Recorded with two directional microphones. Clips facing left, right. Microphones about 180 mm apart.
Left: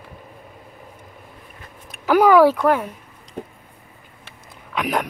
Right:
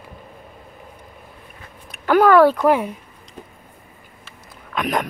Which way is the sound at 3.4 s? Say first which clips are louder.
Left 7 dB; 55° left (ahead or behind).